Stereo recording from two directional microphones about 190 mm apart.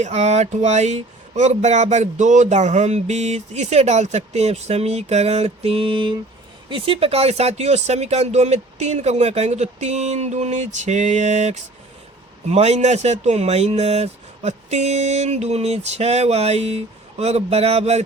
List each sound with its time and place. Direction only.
0.0 s speech: 35° right (ahead or behind)